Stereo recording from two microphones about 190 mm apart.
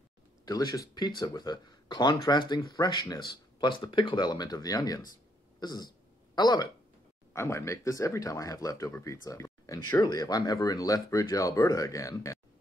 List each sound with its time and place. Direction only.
0.5 s speech: 20° left (ahead or behind)